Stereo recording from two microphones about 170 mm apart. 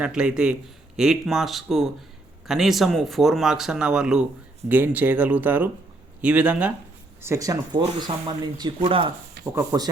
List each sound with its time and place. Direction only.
0.0 s speech: 5° right (ahead or behind); by 9.1 s 30° right (ahead or behind)
9.4 s speech: 20° right (ahead or behind)